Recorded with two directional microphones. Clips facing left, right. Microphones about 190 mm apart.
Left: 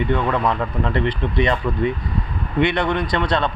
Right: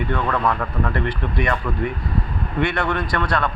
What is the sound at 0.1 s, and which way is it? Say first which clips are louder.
Speech: even; 20° left (ahead or behind).